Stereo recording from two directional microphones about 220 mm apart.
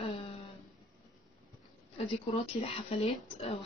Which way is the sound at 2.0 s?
25° left (ahead or behind).